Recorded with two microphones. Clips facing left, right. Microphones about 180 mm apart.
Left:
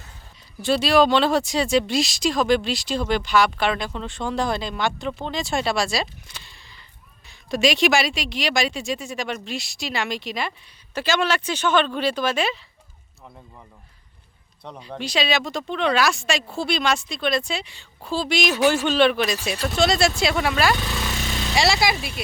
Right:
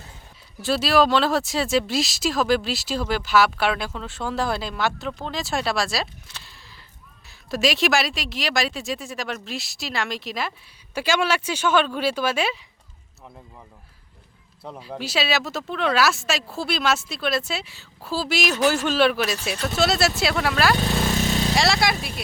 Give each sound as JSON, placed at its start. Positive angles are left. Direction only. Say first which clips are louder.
{"t": 0.6, "sound": "speech", "louder": "left 2 dB", "side_deg": 0}
{"t": 6.4, "sound": "a sound", "louder": "right 1 dB", "side_deg": 0}
{"t": 7.3, "sound": "speech", "louder": "left 2 dB", "side_deg": 0}
{"t": 14.6, "sound": "speech", "louder": "even", "side_deg": -5}
{"t": 20.7, "sound": "a sound", "louder": "right 6 dB", "side_deg": -40}
{"t": 21.5, "sound": "speech", "louder": "left 4 dB", "side_deg": 0}